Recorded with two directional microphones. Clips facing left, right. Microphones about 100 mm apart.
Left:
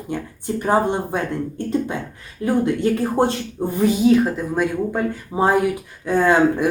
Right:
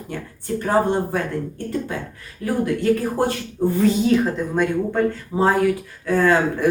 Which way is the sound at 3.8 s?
10° left (ahead or behind).